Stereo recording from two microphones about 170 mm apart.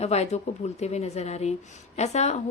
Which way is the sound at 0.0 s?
40° left (ahead or behind).